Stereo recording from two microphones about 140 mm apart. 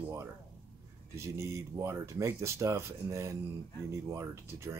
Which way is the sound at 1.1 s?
20° right (ahead or behind).